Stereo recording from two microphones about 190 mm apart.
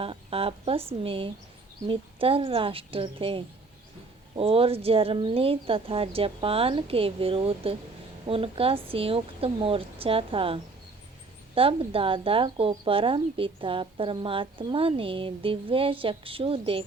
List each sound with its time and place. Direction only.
0.0 s speech: 30° right (ahead or behind)